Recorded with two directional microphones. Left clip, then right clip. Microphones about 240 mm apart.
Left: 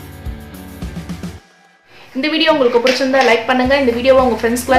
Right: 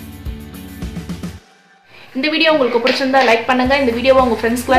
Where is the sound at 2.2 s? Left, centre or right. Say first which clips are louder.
Left 1 dB; centre.